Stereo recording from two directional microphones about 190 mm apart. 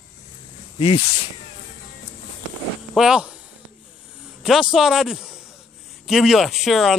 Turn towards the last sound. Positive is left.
turn(degrees=0)  # may be behind; listen again after turning